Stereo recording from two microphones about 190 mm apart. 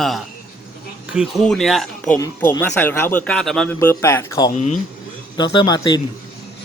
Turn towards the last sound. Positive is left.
turn(degrees=20)  # may be behind; listen again after turning